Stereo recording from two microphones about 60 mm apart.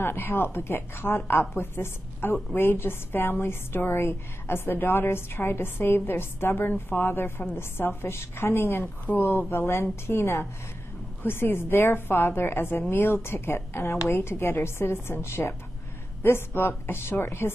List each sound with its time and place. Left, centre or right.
0.0 s a woman's voice: left